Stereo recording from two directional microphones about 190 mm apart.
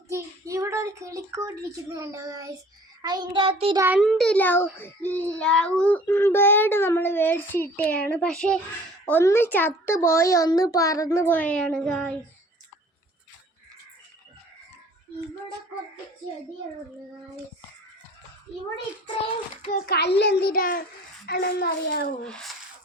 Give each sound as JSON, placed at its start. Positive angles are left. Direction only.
{"t": 0.1, "sound": "child singing", "side_deg": -15}
{"t": 1.7, "sound": "a child's voice", "side_deg": -15}
{"t": 3.0, "sound": "child singing", "side_deg": -20}
{"t": 3.8, "sound": "a child's voice", "side_deg": -10}
{"t": 4.0, "sound": "a child's voice", "side_deg": 0}
{"t": 19.7, "sound": "a child's voice", "side_deg": 55}
{"t": 22.2, "sound": "speech", "side_deg": 5}